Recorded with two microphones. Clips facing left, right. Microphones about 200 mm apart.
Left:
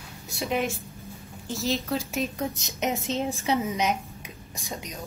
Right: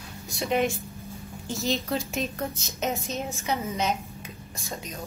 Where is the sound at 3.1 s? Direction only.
30° left (ahead or behind).